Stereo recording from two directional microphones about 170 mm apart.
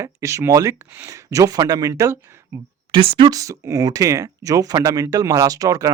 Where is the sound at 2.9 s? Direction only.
30° right (ahead or behind).